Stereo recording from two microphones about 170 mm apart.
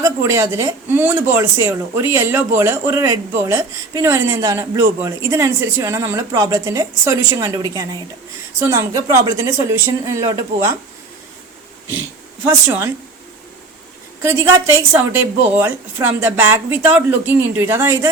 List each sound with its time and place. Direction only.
0.0 s speech: 15° right (ahead or behind)
12.6 s speech: 15° right (ahead or behind)
14.2 s speech: 15° right (ahead or behind)